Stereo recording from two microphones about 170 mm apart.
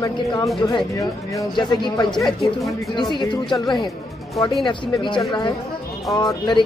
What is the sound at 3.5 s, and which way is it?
Speech, 20° left (ahead or behind).